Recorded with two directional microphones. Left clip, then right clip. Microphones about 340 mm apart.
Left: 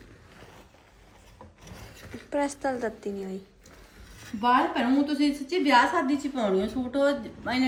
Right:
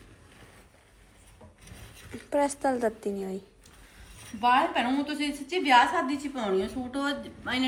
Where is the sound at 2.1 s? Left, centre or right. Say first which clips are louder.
Right 2 dB; centre.